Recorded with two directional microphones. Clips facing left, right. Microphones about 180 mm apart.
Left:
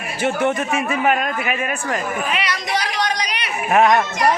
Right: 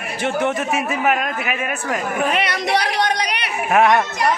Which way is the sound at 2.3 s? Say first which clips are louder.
Right 3 dB; 55° right (ahead or behind).